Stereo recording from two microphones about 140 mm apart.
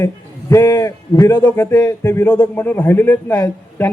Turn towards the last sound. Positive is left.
turn(degrees=15)  # may be behind; listen again after turning